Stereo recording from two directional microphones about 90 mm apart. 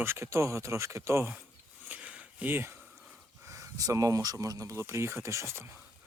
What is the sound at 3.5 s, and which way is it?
Speech, 40° right (ahead or behind).